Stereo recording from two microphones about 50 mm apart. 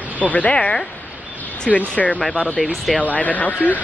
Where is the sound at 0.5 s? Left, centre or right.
Centre.